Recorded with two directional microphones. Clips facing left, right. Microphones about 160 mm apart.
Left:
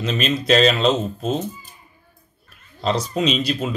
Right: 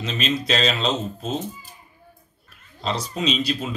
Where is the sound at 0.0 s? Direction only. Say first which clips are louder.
Left 3 dB; 50° left (ahead or behind).